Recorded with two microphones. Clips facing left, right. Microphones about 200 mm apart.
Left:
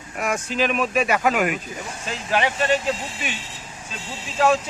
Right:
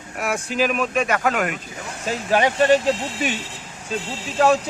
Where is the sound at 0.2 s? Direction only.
10° right (ahead or behind); by 1.5 s 10° left (ahead or behind).